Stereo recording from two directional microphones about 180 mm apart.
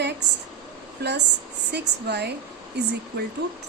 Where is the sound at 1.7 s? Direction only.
65° right (ahead or behind).